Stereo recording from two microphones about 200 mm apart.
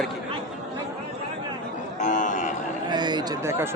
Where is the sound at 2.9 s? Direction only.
20° right (ahead or behind).